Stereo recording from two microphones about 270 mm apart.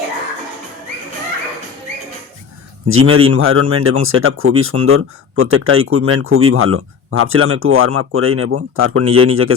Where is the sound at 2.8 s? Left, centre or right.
Right.